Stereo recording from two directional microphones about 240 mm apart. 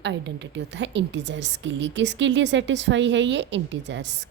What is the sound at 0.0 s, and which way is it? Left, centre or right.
A woman's voice, right.